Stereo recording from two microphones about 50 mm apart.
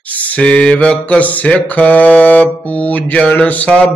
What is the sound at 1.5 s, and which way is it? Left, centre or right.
Mantra, left.